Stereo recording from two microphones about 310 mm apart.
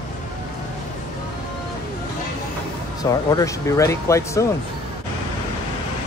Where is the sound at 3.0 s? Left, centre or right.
Centre.